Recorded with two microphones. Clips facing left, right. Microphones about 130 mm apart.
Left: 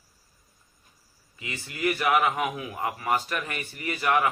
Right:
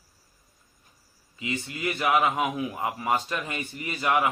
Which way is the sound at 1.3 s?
25° right (ahead or behind).